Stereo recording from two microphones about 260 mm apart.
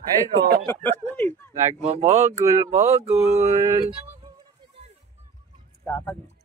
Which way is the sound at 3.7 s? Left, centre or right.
Centre.